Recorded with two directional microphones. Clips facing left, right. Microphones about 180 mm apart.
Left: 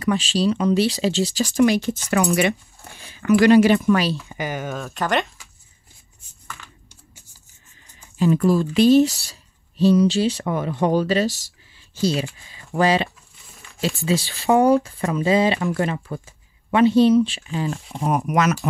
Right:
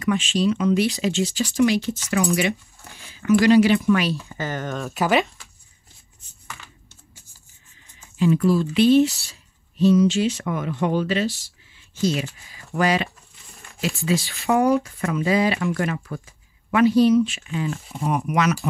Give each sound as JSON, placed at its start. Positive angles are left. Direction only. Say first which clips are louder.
{"t": 0.0, "sound": "speech", "louder": "left 1 dB", "side_deg": 35}
{"t": 4.3, "sound": "speech", "louder": "left 1 dB", "side_deg": 10}
{"t": 8.2, "sound": "speech", "louder": "left 1 dB", "side_deg": 45}
{"t": 18.0, "sound": "speech", "louder": "left 2 dB", "side_deg": 45}